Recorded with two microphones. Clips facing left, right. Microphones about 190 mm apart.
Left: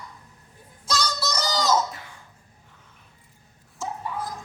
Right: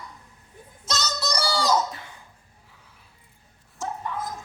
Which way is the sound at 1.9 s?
25° right (ahead or behind).